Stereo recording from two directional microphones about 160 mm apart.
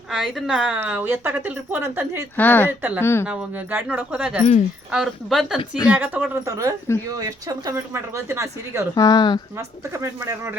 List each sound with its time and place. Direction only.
0.1 s a woman's voice: centre (ahead or behind)
2.3 s speech: 10° left (ahead or behind)
2.6 s a woman's voice: 10° right (ahead or behind)
3.0 s speech: 15° left (ahead or behind)
3.2 s a woman's voice: 10° right (ahead or behind)
5.5 s speech: 25° left (ahead or behind)
5.9 s a woman's voice: 10° right (ahead or behind)
9.0 s speech: 25° left (ahead or behind)
9.6 s a woman's voice: 20° right (ahead or behind)